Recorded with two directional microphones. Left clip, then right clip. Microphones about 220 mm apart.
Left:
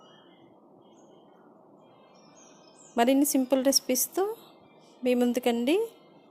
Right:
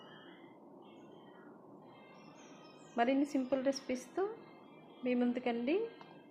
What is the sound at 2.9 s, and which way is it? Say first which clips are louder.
Speech: left 9 dB; 45° left (ahead or behind).